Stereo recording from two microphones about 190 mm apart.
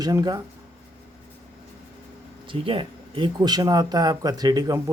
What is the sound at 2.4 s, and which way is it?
Speech, 30° right (ahead or behind).